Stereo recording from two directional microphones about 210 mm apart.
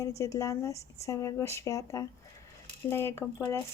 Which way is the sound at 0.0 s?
15° left (ahead or behind).